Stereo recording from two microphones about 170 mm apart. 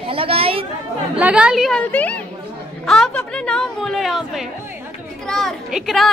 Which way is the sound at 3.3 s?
5° left (ahead or behind).